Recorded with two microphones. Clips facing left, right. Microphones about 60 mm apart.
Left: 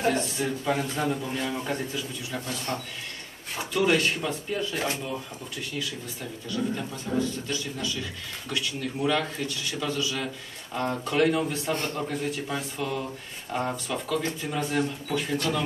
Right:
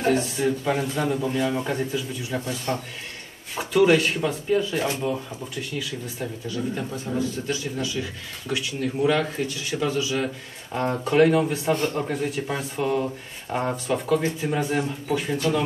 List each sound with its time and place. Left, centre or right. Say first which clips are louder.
0.0 s a man's voice: right 4 dB; centre
2.4 s speech: right 2 dB; right
3.5 s speech: right 6 dB; centre
6.1 s speech: right 1 dB; centre